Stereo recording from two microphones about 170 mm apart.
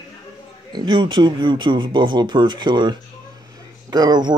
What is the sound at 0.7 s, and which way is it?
Speech, 25° right (ahead or behind).